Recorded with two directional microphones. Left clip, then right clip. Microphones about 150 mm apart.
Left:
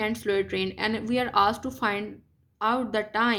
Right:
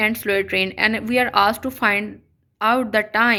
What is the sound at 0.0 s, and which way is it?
A woman's voice, 25° right (ahead or behind).